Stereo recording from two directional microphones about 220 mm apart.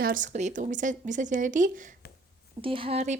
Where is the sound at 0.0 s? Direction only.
35° right (ahead or behind).